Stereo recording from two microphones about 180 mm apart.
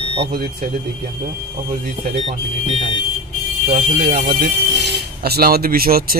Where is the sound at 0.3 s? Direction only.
55° right (ahead or behind).